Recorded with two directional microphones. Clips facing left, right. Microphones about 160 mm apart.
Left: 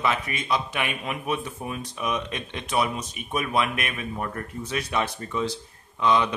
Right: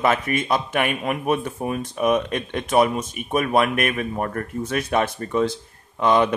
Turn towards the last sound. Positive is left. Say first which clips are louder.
# right 4 dB
turn(degrees=-55)  # may be behind; listen again after turning